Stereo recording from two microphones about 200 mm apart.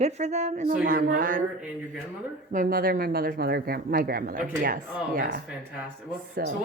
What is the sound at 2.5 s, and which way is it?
Speech, 45° right (ahead or behind).